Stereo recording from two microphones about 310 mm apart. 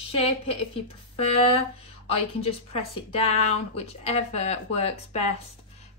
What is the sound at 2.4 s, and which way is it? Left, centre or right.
Speech, centre.